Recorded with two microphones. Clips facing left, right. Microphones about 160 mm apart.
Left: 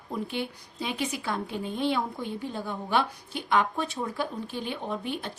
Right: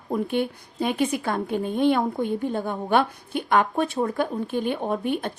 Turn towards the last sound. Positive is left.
turn(degrees=-55)  # may be behind; listen again after turning